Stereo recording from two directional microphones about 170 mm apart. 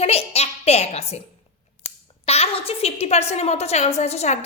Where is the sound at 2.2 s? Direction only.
35° left (ahead or behind).